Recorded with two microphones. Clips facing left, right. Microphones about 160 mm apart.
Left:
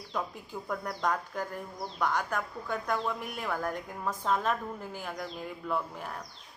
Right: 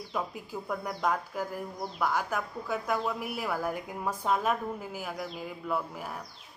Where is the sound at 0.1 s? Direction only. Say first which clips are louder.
Even; 5° right (ahead or behind).